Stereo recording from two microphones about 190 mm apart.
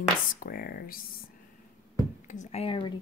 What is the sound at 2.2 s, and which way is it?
Speech, 40° left (ahead or behind).